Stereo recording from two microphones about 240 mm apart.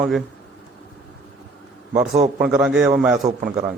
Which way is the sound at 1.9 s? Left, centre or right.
Right.